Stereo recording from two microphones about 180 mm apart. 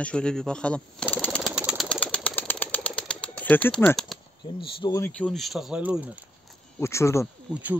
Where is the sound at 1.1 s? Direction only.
10° left (ahead or behind).